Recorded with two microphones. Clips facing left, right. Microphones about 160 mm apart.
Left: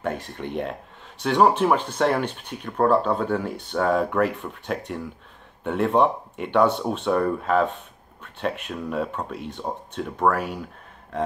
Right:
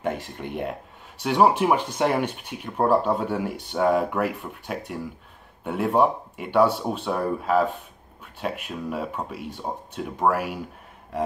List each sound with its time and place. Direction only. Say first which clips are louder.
0.0 s speech: even; 15° right (ahead or behind)